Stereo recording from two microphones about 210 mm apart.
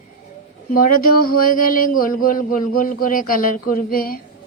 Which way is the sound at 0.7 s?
40° left (ahead or behind).